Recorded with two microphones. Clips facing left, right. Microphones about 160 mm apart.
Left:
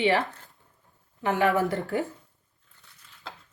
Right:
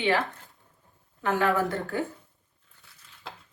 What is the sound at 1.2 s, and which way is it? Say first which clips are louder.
Speech: left 1 dB; 20° left (ahead or behind).